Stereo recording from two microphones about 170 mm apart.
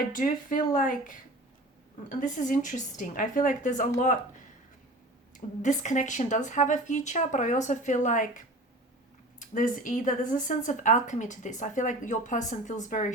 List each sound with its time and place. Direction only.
0.1 s speech: 55° left (ahead or behind)
5.3 s speech: 45° left (ahead or behind)
9.4 s speech: 50° left (ahead or behind)